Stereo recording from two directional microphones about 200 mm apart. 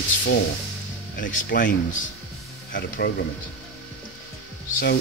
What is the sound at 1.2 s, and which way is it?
Speech, 40° left (ahead or behind).